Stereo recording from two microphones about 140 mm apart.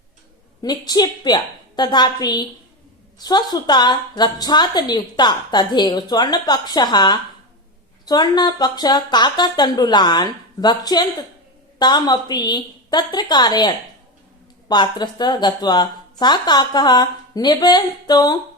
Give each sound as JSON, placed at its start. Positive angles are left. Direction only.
{"t": 0.6, "sound": "a woman's voice", "side_deg": 30}